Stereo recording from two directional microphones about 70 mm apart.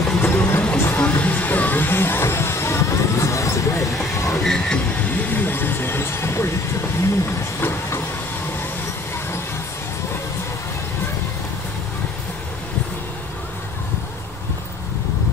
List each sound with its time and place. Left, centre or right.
0.2 s vehicle: left
0.9 s music: left
4.1 s train: left
4.4 s music: centre
5.3 s vehicle: left